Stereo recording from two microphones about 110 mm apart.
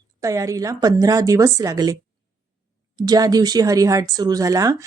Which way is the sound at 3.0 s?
35° right (ahead or behind).